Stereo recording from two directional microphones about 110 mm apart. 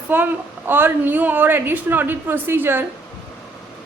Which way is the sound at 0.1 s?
15° right (ahead or behind).